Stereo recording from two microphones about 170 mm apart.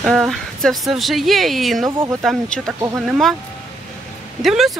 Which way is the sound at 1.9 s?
20° right (ahead or behind).